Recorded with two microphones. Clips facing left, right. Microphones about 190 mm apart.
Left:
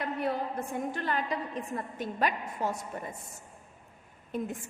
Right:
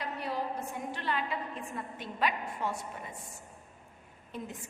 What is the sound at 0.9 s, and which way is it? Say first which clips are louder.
A woman's voice: even; 45° left (ahead or behind).